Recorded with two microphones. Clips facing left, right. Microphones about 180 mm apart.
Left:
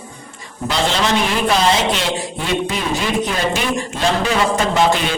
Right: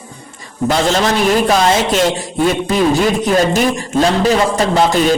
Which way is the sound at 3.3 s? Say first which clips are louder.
Right 7 dB; 40° right (ahead or behind).